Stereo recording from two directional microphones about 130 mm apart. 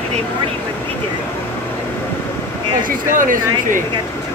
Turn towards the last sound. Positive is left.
turn(degrees=-90)